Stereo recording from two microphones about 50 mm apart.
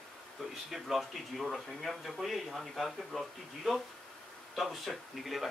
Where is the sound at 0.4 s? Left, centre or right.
Centre.